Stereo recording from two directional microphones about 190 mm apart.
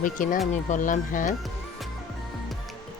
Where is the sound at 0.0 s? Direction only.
45° left (ahead or behind).